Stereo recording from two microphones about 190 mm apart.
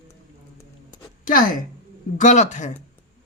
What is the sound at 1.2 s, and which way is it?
A woman's voice, 45° left (ahead or behind).